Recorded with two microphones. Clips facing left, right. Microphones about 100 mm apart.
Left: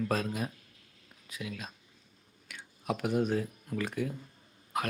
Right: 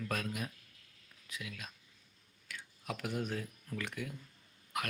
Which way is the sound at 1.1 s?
25° left (ahead or behind).